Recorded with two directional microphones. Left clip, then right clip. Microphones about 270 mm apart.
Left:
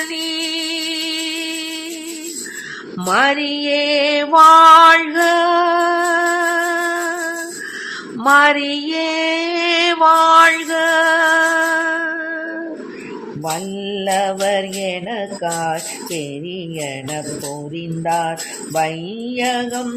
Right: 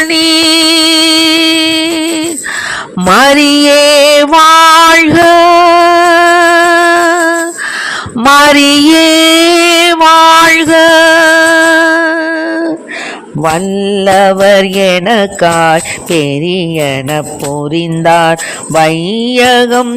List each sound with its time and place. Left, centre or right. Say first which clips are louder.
0.1 s music: right 15 dB; right
8.3 s a sound: right 8 dB; right
13.4 s mantra: right 14 dB; right
17.7 s jingle bell: right 12 dB; right